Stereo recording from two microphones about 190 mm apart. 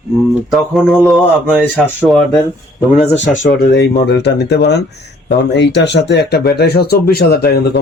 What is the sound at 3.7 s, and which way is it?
Speech, 60° left (ahead or behind).